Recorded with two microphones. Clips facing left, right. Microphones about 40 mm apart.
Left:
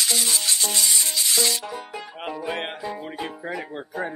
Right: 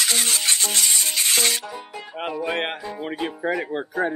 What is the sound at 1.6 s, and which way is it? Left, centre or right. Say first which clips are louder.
Music: left 1 dB; centre.